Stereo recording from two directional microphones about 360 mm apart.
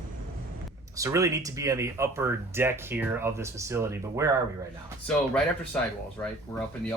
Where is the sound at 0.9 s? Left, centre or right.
Centre.